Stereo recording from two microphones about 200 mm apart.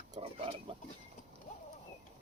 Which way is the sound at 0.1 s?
30° right (ahead or behind).